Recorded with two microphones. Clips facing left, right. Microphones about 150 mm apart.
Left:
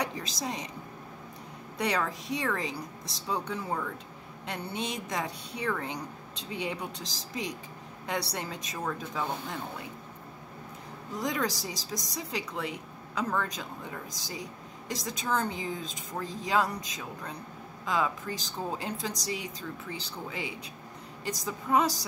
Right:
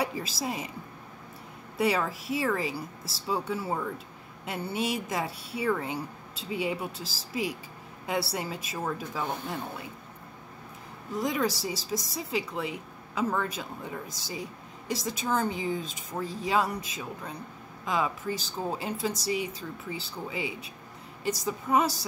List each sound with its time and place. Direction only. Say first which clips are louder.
0.0 s a woman's voice: right 3 dB; 5° right (ahead or behind)
1.8 s a woman's voice: right 3 dB; 5° right (ahead or behind)
11.1 s a woman's voice: right 3 dB; centre (ahead or behind)